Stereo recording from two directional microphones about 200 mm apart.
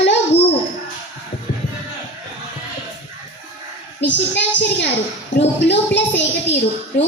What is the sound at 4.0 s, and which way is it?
A woman's voice, 60° left (ahead or behind).